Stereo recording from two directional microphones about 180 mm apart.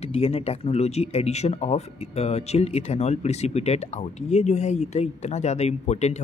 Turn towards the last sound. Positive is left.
turn(degrees=35)  # may be behind; listen again after turning